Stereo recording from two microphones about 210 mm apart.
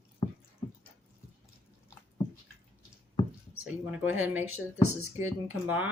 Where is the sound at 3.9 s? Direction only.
10° right (ahead or behind).